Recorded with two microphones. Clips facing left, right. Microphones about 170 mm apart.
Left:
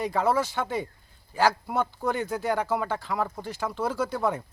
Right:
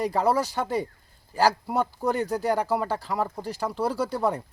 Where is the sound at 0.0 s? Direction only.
35° right (ahead or behind).